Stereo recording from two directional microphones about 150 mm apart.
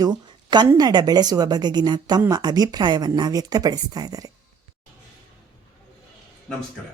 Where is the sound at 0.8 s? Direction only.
25° right (ahead or behind).